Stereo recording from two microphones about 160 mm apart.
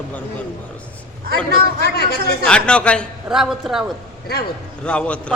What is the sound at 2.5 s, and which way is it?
A man's voice, 5° left (ahead or behind).